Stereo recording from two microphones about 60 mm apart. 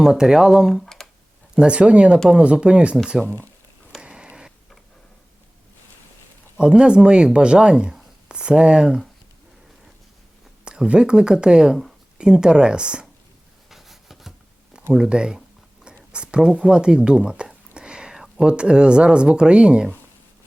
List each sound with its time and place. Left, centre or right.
0.0 s speech: centre
0.8 s computer keyboard: centre
1.5 s speech: centre
3.2 s speech: right
4.0 s a sound: centre
6.6 s speech: centre
10.7 s speech: centre
13.7 s a sound: centre
14.9 s speech: centre
15.8 s a sound: centre
16.6 s speech: centre